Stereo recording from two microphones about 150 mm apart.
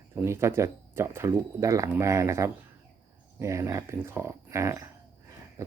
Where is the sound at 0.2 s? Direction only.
15° right (ahead or behind).